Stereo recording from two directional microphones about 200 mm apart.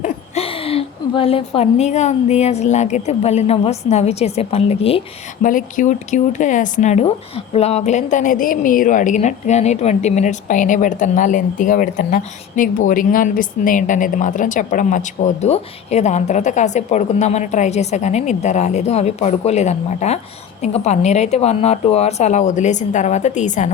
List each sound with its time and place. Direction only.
0.0 s a woman's voice: 30° left (ahead or behind)
5.5 s speech: 40° left (ahead or behind)